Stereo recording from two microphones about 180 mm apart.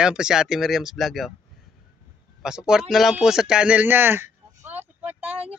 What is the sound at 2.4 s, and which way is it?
A man's voice, 5° right (ahead or behind).